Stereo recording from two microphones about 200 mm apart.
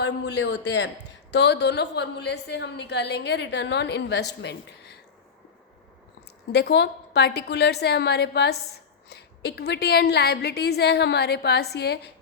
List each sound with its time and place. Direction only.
0.0 s a woman's voice: 60° left (ahead or behind)
6.5 s a woman's voice: 55° left (ahead or behind)